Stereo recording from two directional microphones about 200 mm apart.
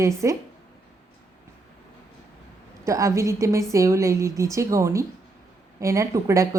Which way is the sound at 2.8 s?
15° right (ahead or behind).